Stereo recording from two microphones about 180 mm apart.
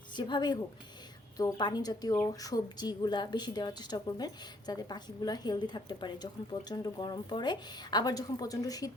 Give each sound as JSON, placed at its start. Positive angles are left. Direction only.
{"t": 0.2, "sound": "speech", "side_deg": 25}